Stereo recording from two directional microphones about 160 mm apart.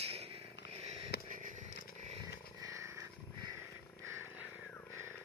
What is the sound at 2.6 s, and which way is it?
Wild animals, 20° right (ahead or behind).